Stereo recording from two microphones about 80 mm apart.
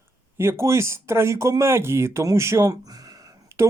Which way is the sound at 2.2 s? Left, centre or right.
Right.